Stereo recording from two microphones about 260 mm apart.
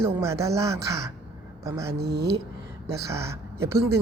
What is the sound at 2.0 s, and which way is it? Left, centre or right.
Speech, right.